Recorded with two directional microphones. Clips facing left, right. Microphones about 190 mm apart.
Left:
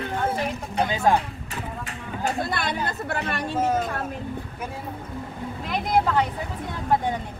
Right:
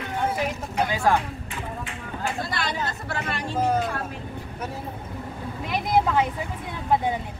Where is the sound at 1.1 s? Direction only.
40° left (ahead or behind).